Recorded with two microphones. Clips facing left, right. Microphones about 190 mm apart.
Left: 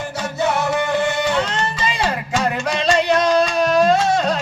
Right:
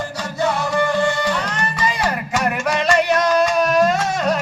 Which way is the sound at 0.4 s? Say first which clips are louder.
Right 1 dB; 20° left (ahead or behind).